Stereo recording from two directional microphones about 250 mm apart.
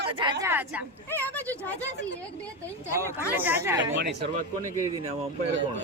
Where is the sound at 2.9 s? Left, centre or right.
Centre.